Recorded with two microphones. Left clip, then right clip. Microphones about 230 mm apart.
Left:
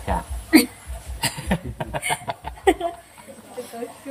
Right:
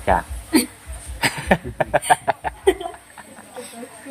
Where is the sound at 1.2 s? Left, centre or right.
Centre.